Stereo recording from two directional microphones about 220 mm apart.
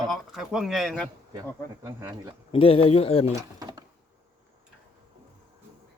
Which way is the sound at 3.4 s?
15° right (ahead or behind).